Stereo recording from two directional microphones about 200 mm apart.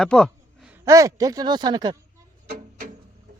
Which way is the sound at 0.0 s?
Centre (ahead or behind).